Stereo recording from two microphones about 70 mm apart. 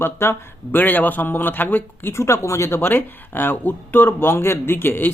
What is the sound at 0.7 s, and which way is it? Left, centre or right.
Speech, left.